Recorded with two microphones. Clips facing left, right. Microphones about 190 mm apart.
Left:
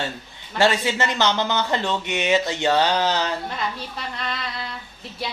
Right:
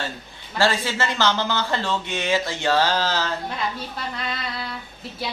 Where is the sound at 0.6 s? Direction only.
20° left (ahead or behind).